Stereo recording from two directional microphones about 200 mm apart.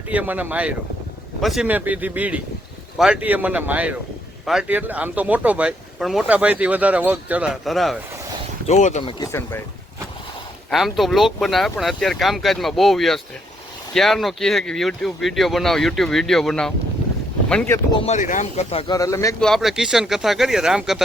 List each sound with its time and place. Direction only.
0.1 s speech: 10° right (ahead or behind)
8.6 s speech: 35° left (ahead or behind); by 9.6 s 15° left (ahead or behind)
10.7 s speech: centre (ahead or behind)
17.9 s speech: 35° left (ahead or behind)
18.9 s speech: 15° left (ahead or behind)
19.4 s speech: centre (ahead or behind)